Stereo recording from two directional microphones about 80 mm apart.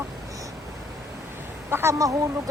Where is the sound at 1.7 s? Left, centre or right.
Right.